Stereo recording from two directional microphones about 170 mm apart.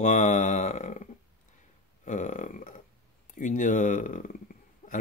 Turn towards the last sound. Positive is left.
turn(degrees=45)  # may be behind; listen again after turning